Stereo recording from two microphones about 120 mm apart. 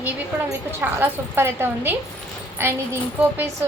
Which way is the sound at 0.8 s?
20° right (ahead or behind).